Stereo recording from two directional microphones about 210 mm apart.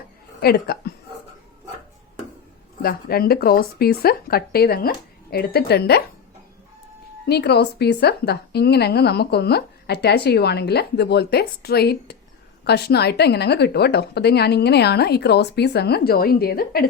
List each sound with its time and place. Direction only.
0.4 s a woman's voice: 45° left (ahead or behind)
2.8 s a woman's voice: 45° left (ahead or behind)
7.3 s a woman's voice: 50° left (ahead or behind)